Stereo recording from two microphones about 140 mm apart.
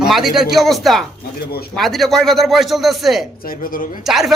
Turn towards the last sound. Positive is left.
turn(degrees=0)  # may be behind; listen again after turning